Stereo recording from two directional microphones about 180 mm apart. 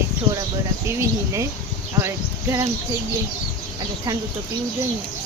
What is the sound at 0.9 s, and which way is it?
Speech, 15° right (ahead or behind).